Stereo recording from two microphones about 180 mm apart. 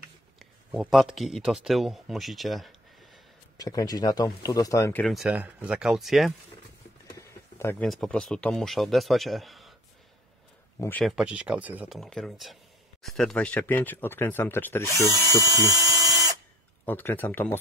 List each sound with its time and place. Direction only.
0.7 s a man's voice: centre (ahead or behind)
3.5 s speech: 20° left (ahead or behind)
5.0 s speech: centre (ahead or behind)
7.2 s a sound: 15° left (ahead or behind)
7.8 s speech: centre (ahead or behind)
10.8 s speech: 10° left (ahead or behind)
11.1 s speech: 5° right (ahead or behind); by 14.9 s 10° left (ahead or behind)
15.1 s a sound: 20° right (ahead or behind)
16.8 s speech: 10° left (ahead or behind)